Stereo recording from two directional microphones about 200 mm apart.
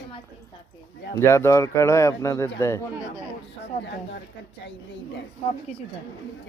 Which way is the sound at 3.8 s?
60° left (ahead or behind).